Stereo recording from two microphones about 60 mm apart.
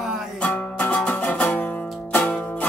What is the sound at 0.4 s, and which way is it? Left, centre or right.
Music, left.